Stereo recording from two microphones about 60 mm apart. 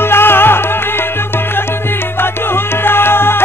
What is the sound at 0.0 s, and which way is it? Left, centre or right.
Music, left.